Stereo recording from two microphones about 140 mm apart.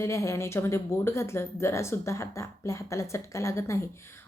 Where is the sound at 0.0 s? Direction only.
20° left (ahead or behind).